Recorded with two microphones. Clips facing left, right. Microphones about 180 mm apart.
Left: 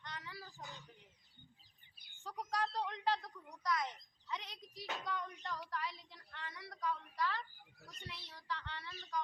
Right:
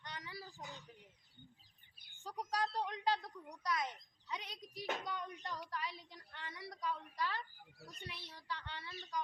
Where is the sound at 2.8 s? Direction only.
15° right (ahead or behind).